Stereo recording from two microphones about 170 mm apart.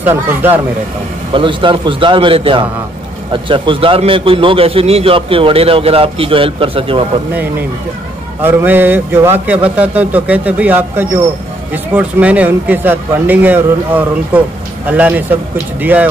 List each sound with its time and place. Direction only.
0.0 s a man's voice: 10° right (ahead or behind)
1.3 s a man's voice: 30° right (ahead or behind)
8.4 s a man's voice: 10° right (ahead or behind)